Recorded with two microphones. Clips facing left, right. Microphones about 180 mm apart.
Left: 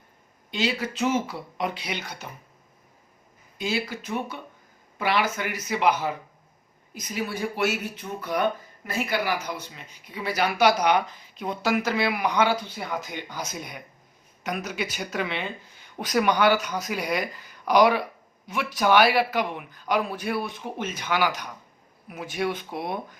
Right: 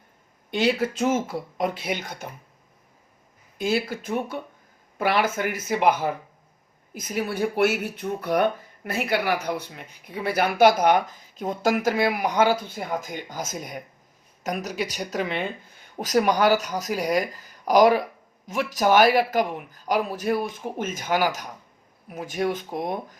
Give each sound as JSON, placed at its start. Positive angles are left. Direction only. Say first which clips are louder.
{"t": 0.5, "sound": "speech", "louder": "right 5 dB", "side_deg": -55}
{"t": 3.6, "sound": "speech", "louder": "right 4 dB", "side_deg": -55}